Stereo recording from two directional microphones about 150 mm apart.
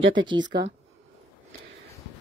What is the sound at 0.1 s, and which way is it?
Speech, 30° right (ahead or behind).